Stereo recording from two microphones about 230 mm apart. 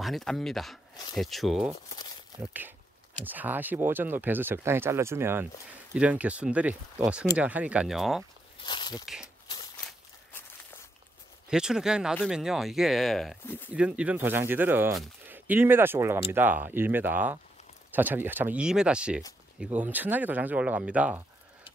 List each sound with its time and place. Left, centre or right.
0.0 s speech: centre
8.6 s speech: centre
9.0 s speech: centre
11.4 s speech: centre